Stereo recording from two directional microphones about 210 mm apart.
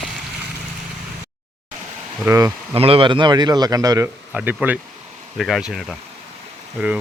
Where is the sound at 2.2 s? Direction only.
15° right (ahead or behind).